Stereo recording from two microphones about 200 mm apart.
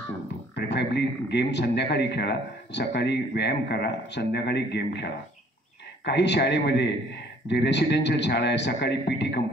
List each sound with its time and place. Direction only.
0.6 s speech: 60° left (ahead or behind)